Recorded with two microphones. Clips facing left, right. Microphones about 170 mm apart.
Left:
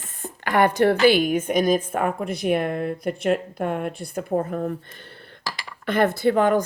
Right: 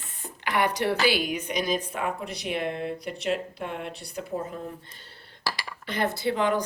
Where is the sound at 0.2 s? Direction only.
50° left (ahead or behind).